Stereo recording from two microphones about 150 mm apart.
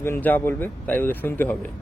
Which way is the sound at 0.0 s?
15° left (ahead or behind).